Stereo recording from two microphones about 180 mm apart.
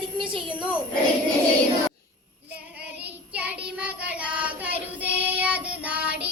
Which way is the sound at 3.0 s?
10° right (ahead or behind).